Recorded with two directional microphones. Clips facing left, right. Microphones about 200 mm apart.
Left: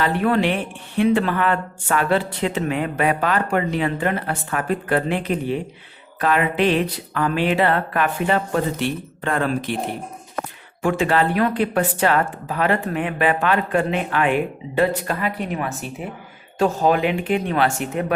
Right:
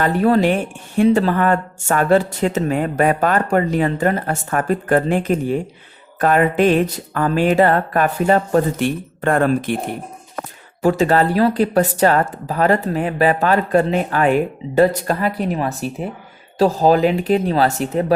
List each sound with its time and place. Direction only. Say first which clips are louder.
0.0 s speech: right 4 dB; 40° right (ahead or behind)
10.8 s speech: right 4 dB; 40° right (ahead or behind)